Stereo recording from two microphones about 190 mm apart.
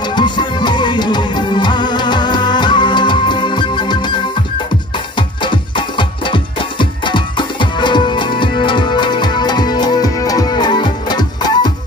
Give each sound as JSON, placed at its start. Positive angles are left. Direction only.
{"t": 0.0, "sound": "music", "side_deg": 25}